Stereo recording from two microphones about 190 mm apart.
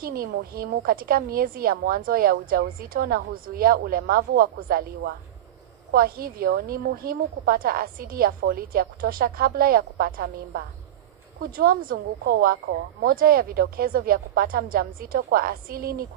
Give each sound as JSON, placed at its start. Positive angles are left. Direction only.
{"t": 0.0, "sound": "a woman's voice", "side_deg": -50}